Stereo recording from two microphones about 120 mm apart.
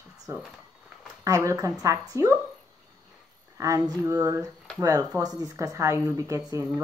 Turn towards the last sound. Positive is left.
turn(degrees=-25)  # may be behind; listen again after turning